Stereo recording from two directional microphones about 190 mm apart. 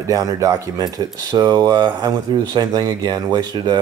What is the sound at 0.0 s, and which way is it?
Speech, 15° right (ahead or behind).